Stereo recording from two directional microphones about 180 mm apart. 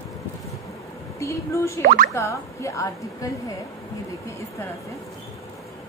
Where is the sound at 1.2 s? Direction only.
15° left (ahead or behind).